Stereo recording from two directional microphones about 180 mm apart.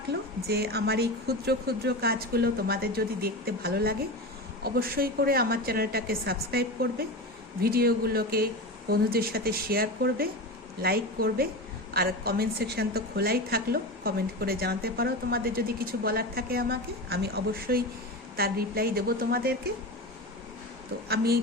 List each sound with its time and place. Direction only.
0.1 s a woman's voice: 60° right (ahead or behind)